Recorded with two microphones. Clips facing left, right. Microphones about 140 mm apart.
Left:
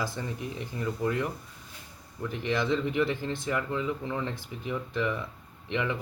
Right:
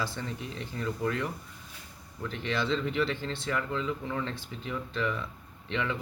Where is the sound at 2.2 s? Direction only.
15° left (ahead or behind).